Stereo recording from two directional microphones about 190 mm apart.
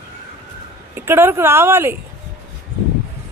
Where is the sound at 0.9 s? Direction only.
10° right (ahead or behind).